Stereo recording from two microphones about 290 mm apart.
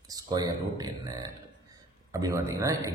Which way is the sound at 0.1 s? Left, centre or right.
Centre.